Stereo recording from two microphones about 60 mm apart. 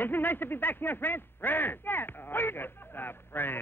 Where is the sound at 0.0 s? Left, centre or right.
Left.